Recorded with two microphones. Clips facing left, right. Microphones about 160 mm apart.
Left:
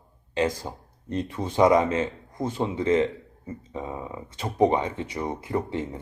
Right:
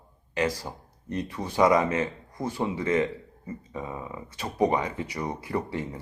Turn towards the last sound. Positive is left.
turn(degrees=20)  # may be behind; listen again after turning